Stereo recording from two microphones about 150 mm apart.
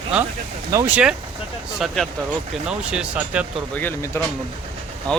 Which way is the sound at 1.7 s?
Centre (ahead or behind).